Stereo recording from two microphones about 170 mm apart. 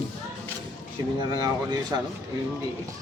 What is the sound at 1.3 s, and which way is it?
Speech, 25° right (ahead or behind).